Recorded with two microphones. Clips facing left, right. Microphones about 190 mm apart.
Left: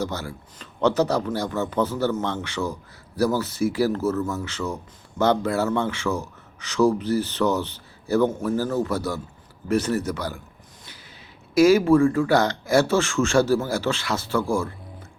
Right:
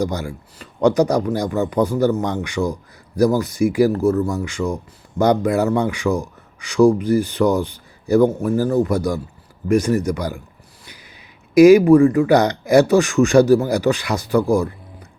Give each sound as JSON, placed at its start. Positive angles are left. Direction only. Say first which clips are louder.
{"t": 0.0, "sound": "speech", "louder": "right 6 dB", "side_deg": -15}
{"t": 11.5, "sound": "speech", "louder": "right 7 dB", "side_deg": -15}